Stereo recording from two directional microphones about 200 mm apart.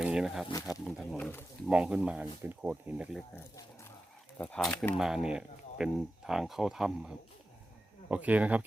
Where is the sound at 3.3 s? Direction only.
15° left (ahead or behind).